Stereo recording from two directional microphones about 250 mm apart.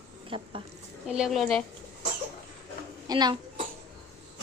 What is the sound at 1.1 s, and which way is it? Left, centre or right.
Speech, centre.